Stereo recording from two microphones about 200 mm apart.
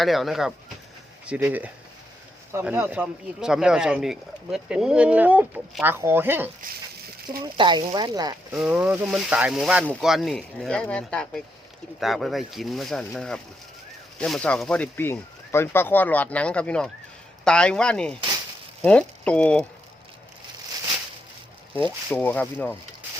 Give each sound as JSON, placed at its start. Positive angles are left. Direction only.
{"t": 0.0, "sound": "speech", "side_deg": 0}
{"t": 7.4, "sound": "speech", "side_deg": -20}
{"t": 8.5, "sound": "speech", "side_deg": -5}
{"t": 22.1, "sound": "speech", "side_deg": 10}